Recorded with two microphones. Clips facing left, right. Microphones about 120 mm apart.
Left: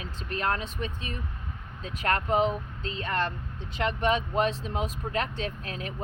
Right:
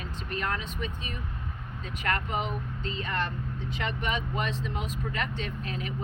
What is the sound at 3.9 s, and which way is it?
Speech, 35° left (ahead or behind).